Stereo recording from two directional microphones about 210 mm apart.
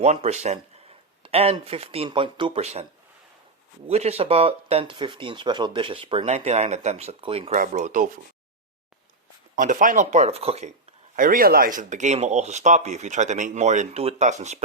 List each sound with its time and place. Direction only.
0.0 s speech: 30° right (ahead or behind)
3.8 s speech: 30° right (ahead or behind)
9.6 s speech: 40° right (ahead or behind)
11.2 s speech: 40° right (ahead or behind)